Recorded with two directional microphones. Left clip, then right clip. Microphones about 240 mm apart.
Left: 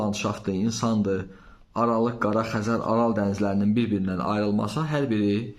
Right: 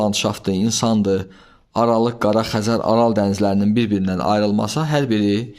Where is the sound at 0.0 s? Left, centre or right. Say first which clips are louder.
Right 8 dB; right.